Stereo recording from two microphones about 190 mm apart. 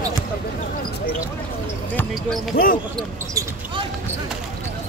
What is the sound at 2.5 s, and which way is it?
Speech, 50° left (ahead or behind).